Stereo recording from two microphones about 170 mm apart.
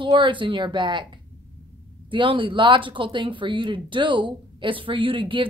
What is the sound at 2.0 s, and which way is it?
Speech, 30° right (ahead or behind).